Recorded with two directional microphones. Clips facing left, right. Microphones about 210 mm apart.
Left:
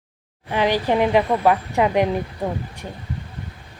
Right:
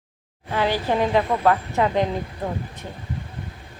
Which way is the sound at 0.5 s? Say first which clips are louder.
Left 3 dB; 15° left (ahead or behind).